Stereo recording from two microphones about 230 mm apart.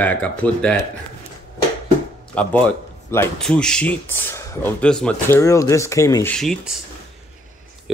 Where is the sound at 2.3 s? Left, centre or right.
Centre.